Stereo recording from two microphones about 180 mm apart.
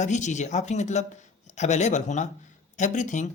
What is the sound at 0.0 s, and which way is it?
Speech, 40° left (ahead or behind).